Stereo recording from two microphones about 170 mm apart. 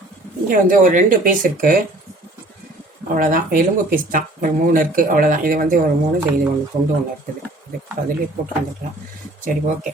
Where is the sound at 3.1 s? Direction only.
55° right (ahead or behind).